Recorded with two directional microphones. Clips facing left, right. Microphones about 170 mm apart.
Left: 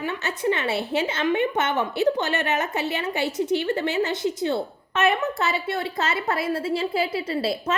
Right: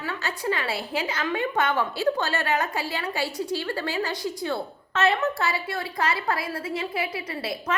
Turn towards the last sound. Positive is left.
turn(degrees=30)  # may be behind; listen again after turning